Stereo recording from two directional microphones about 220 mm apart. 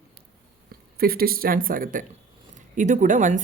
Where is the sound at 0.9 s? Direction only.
45° right (ahead or behind).